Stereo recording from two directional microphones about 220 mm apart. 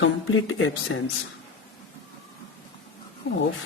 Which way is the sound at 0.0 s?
60° left (ahead or behind).